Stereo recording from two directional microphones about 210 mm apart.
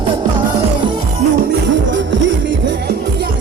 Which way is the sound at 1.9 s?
60° right (ahead or behind).